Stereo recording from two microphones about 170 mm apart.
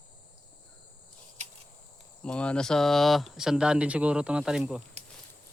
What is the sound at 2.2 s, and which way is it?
Speech, 5° left (ahead or behind).